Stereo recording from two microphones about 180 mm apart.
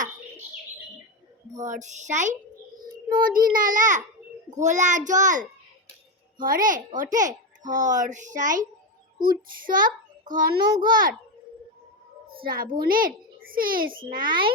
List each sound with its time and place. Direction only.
1.5 s a child's voice: 40° right (ahead or behind)
12.3 s a child's voice: 55° right (ahead or behind)
14.3 s a child's voice: 25° right (ahead or behind)